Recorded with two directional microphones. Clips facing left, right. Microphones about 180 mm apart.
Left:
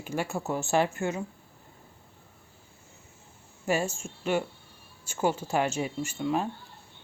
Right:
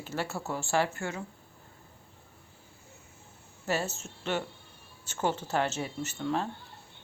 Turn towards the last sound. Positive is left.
turn(degrees=10)  # may be behind; listen again after turning